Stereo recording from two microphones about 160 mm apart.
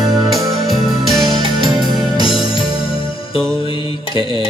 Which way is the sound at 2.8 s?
35° left (ahead or behind).